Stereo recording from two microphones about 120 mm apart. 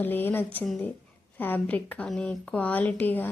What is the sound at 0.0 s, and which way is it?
Speech, 15° left (ahead or behind).